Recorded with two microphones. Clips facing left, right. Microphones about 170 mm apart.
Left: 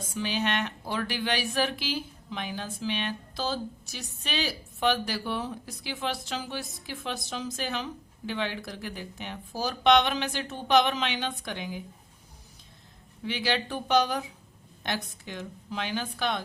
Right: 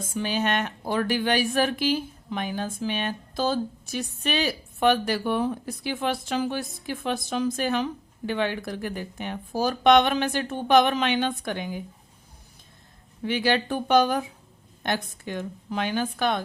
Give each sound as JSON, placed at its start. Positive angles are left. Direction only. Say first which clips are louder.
{"t": 0.1, "sound": "speech", "louder": "right 4 dB", "side_deg": -45}
{"t": 13.2, "sound": "speech", "louder": "right 6 dB", "side_deg": -50}